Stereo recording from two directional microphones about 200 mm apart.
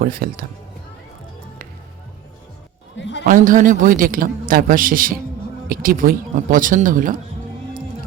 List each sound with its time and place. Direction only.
0.0 s a man's voice: 45° right (ahead or behind)
3.0 s a man's voice: 60° left (ahead or behind)
3.2 s a man's voice: 40° right (ahead or behind)